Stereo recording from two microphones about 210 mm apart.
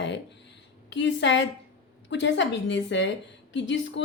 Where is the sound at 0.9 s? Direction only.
60° left (ahead or behind).